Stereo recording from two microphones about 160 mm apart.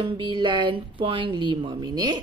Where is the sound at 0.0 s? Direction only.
30° right (ahead or behind).